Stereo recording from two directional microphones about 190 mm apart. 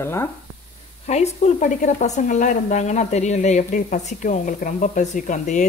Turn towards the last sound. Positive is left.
turn(degrees=40)  # may be behind; listen again after turning